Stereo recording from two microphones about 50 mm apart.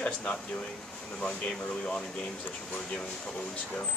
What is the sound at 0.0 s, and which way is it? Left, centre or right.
Speech, left.